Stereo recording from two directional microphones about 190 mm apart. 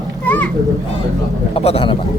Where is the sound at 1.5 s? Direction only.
30° left (ahead or behind).